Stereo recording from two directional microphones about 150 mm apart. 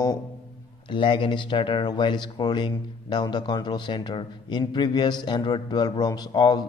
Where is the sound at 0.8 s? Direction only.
35° left (ahead or behind).